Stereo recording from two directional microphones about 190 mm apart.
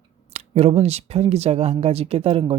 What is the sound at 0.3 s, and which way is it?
Speech, 35° right (ahead or behind).